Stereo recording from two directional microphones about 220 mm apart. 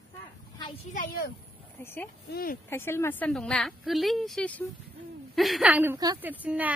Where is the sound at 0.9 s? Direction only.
45° left (ahead or behind).